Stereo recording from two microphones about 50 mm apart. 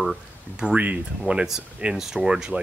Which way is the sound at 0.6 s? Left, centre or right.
Right.